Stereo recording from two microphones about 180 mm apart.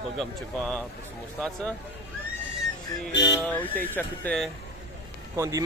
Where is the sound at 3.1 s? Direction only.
75° left (ahead or behind).